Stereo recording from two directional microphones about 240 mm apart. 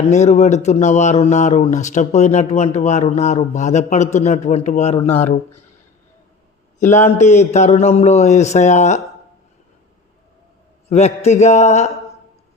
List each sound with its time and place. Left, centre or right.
0.1 s speech: left
7.1 s speech: left
10.8 s speech: left